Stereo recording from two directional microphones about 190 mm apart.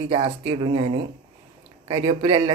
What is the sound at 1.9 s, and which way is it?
Speech, 30° right (ahead or behind).